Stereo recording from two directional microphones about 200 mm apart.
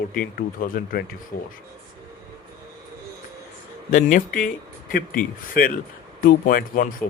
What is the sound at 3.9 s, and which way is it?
Speech, 40° left (ahead or behind).